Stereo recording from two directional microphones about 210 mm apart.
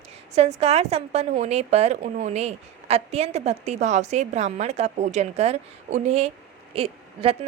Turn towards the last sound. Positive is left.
turn(degrees=-30)  # may be behind; listen again after turning